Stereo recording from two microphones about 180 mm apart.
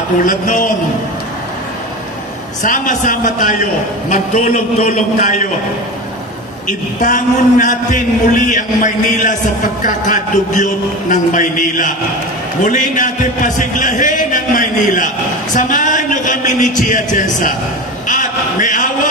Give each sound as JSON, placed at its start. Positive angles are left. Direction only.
{"t": 0.2, "sound": "a man's voice", "side_deg": 50}
{"t": 2.6, "sound": "a man's voice", "side_deg": 45}
{"t": 6.7, "sound": "a man's voice", "side_deg": 45}
{"t": 18.0, "sound": "a sound", "side_deg": 45}